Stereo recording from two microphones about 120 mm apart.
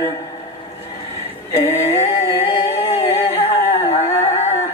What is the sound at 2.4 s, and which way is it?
Music, 55° left (ahead or behind).